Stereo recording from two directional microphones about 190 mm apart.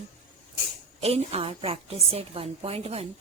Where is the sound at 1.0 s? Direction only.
30° right (ahead or behind).